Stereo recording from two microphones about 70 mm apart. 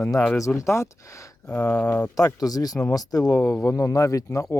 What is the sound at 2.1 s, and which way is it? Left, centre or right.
Speech, left.